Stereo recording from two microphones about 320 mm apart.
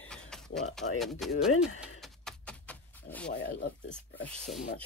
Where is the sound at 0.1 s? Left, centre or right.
Centre.